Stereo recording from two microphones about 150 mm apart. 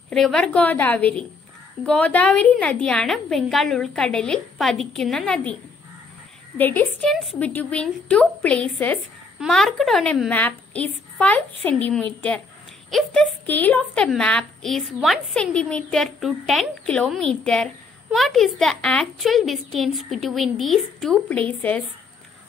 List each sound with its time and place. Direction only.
0.1 s a woman's voice: 5° left (ahead or behind)
6.6 s a woman's voice: 10° left (ahead or behind)